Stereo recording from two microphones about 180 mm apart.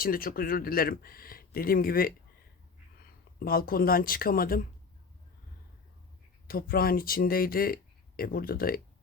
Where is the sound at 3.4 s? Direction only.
55° left (ahead or behind).